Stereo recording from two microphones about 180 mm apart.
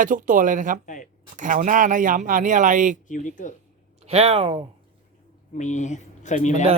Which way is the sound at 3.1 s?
45° left (ahead or behind).